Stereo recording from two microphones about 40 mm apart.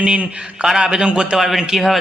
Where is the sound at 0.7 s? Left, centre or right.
Centre.